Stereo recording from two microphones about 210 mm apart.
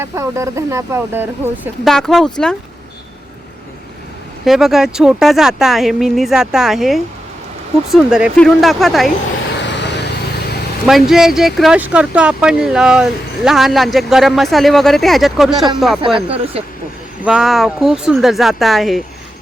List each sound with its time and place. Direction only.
0.0 s speech: 15° right (ahead or behind)
1.9 s speech: centre (ahead or behind)
4.4 s speech: centre (ahead or behind)
9.6 s vehicle: 55° left (ahead or behind)
10.8 s speech: centre (ahead or behind)
16.1 s speech: 30° right (ahead or behind)
17.2 s speech: centre (ahead or behind)